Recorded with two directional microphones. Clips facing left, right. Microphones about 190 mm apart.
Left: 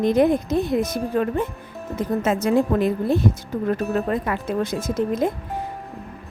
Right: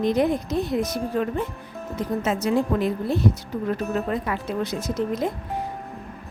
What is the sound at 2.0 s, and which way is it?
A woman's voice, 50° left (ahead or behind).